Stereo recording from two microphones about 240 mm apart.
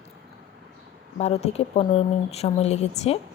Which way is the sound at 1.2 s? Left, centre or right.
Left.